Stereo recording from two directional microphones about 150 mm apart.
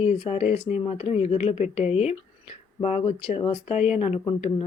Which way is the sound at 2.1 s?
45° left (ahead or behind).